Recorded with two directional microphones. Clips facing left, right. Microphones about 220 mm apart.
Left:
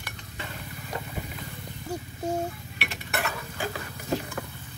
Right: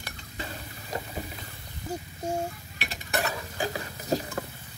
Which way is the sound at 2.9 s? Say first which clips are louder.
Right 2 dB; 35° right (ahead or behind).